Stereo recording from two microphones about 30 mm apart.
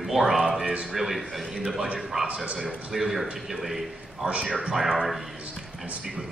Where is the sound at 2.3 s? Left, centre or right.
Right.